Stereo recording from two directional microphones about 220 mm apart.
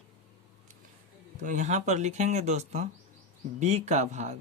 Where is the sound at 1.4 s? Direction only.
35° right (ahead or behind).